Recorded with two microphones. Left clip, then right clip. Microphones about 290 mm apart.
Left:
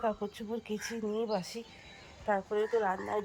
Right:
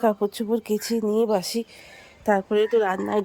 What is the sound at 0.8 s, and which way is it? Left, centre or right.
Speech, right.